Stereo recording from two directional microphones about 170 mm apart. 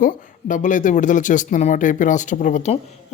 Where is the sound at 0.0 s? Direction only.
50° left (ahead or behind).